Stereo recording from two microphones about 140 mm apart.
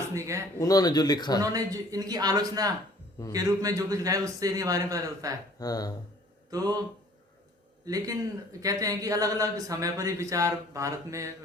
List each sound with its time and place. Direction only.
0.1 s a man's voice: 20° right (ahead or behind)
0.6 s speech: 25° left (ahead or behind)
1.4 s a man's voice: 25° right (ahead or behind)
5.5 s speech: 25° left (ahead or behind)
6.5 s speech: 25° right (ahead or behind)
7.9 s a man's voice: 25° right (ahead or behind)